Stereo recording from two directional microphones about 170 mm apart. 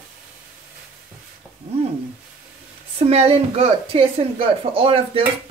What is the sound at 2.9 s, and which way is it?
A woman's voice, 35° right (ahead or behind).